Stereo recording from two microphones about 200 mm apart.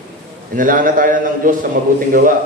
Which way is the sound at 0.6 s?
45° right (ahead or behind).